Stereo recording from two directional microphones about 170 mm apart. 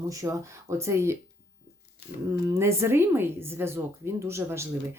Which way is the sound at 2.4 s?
15° right (ahead or behind).